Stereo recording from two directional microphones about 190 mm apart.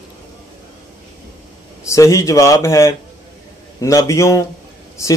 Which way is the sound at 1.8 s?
15° left (ahead or behind).